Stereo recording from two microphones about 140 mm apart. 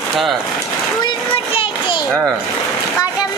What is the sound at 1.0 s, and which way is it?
Children playing, 40° left (ahead or behind).